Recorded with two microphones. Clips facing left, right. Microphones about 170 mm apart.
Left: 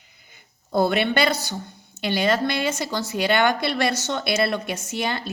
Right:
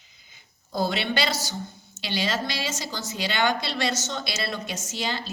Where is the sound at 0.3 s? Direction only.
60° left (ahead or behind).